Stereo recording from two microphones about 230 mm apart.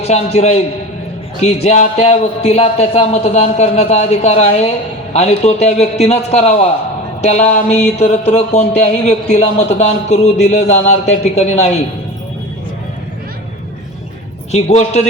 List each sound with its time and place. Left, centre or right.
0.1 s a man's voice: left
14.5 s a man's voice: left